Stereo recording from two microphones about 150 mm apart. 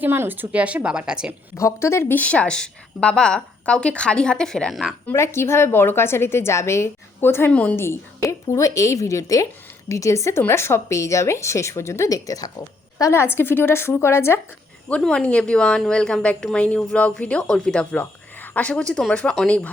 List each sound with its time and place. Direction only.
0.0 s a woman's voice: 15° right (ahead or behind)
1.5 s a woman's voice: 20° left (ahead or behind); by 4.9 s centre (ahead or behind)
5.0 s a woman's voice: 15° left (ahead or behind)